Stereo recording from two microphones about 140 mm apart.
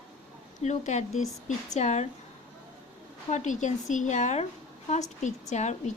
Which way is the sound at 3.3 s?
60° left (ahead or behind).